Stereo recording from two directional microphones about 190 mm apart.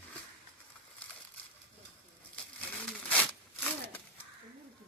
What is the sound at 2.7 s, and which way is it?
Zipper, 10° left (ahead or behind).